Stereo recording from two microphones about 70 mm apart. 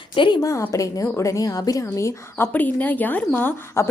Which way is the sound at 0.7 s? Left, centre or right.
Left.